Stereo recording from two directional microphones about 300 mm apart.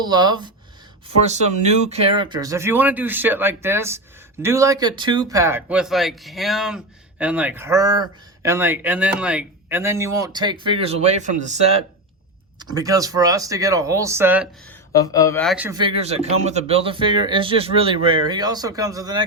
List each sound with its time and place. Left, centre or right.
0.0 s speech: centre
14.7 s speech: centre